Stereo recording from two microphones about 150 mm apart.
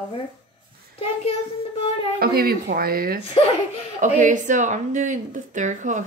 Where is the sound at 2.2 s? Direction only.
90° right.